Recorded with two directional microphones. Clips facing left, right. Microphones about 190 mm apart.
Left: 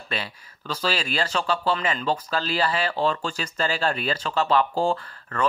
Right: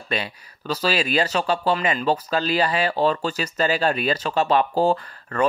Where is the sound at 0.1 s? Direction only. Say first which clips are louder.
Right 5 dB; 15° right (ahead or behind).